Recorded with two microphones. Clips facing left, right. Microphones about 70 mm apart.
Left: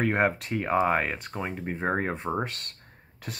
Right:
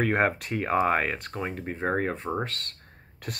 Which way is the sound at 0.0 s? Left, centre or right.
Centre.